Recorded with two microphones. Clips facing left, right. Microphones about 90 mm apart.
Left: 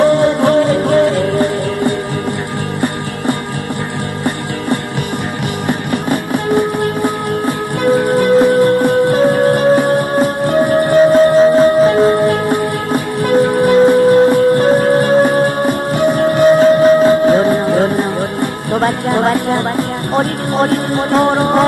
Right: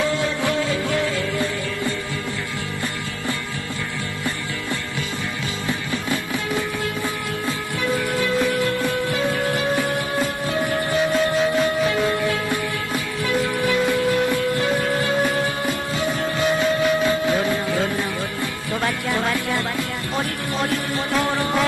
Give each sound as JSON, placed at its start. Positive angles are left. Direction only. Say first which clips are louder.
{"t": 0.0, "sound": "music", "louder": "left 12 dB", "side_deg": 65}
{"t": 5.7, "sound": "music", "louder": "left 9 dB", "side_deg": 60}
{"t": 12.3, "sound": "music", "louder": "left 9 dB", "side_deg": 55}
{"t": 16.4, "sound": "a sound", "louder": "left 12 dB", "side_deg": 45}
{"t": 17.9, "sound": "music", "louder": "left 9 dB", "side_deg": 55}